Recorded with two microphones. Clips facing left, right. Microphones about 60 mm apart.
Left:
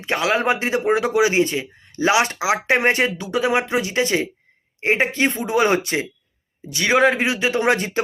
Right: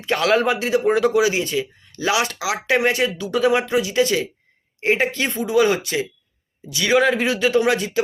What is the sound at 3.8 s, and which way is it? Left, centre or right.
A man's voice, left.